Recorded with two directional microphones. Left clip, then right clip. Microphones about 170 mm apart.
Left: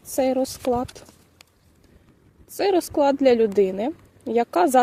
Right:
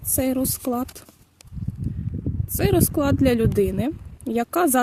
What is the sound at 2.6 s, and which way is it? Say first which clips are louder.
A woman's voice: left 2 dB; 45° right (ahead or behind).